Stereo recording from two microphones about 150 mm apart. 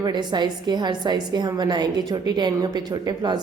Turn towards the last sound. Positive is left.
turn(degrees=-30)  # may be behind; listen again after turning